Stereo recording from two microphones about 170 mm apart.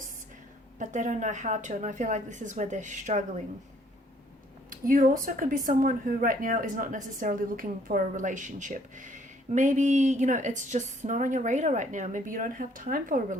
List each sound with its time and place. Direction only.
0.8 s speech: 45° right (ahead or behind)
4.7 s speech: 50° right (ahead or behind)